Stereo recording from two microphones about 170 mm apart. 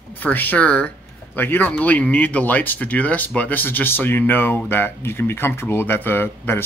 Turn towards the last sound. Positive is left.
turn(degrees=15)  # may be behind; listen again after turning